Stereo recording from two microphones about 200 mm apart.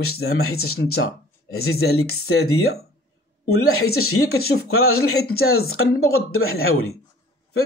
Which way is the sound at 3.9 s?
90° left.